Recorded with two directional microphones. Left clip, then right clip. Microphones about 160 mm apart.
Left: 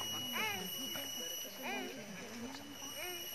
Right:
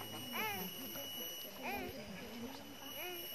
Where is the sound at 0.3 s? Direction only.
10° left (ahead or behind).